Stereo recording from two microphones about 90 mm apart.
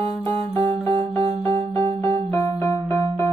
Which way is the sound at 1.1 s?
90° right.